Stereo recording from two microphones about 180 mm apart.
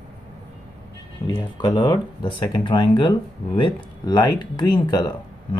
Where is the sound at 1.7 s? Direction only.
25° left (ahead or behind).